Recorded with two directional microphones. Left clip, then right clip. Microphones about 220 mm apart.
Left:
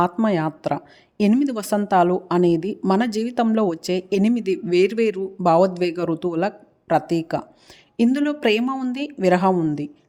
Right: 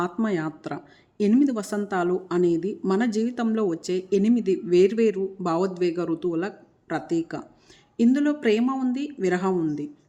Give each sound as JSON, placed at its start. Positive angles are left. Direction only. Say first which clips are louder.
{"t": 0.0, "sound": "speech", "louder": "left 6 dB", "side_deg": 35}